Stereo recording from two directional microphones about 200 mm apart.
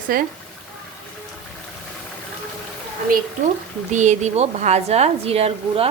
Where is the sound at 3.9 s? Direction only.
35° right (ahead or behind).